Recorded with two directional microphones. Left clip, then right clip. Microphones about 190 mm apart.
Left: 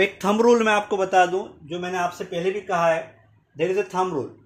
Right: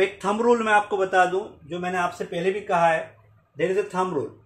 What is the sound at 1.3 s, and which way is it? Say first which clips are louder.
Speech: left 1 dB; 25° left (ahead or behind).